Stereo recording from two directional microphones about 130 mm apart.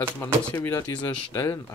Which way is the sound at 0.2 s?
20° left (ahead or behind).